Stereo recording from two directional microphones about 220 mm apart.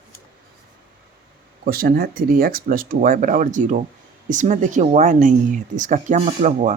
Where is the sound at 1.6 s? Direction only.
40° right (ahead or behind).